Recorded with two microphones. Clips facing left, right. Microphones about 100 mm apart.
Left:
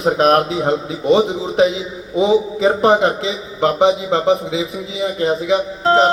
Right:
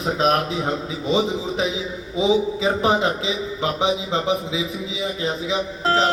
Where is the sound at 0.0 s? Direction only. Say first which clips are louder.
Left 6 dB; 55° left (ahead or behind).